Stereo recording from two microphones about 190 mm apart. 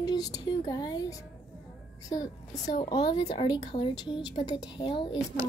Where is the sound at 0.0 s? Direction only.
20° left (ahead or behind).